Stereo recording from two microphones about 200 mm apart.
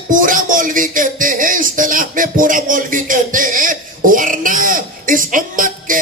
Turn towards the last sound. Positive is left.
turn(degrees=-40)  # may be behind; listen again after turning